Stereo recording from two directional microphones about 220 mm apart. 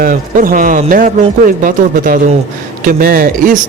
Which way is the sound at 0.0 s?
40° right (ahead or behind).